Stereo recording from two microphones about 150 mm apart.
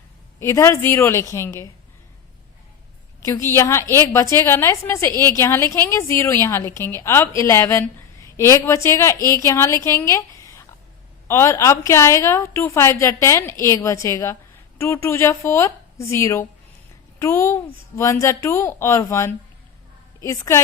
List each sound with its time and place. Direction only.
0.3 s a woman's voice: 20° left (ahead or behind)
3.2 s a woman's voice: 15° left (ahead or behind)